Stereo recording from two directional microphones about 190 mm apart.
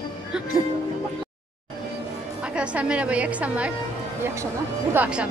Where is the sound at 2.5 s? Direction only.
5° right (ahead or behind).